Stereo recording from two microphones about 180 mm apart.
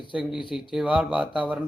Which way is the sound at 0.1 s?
5° right (ahead or behind).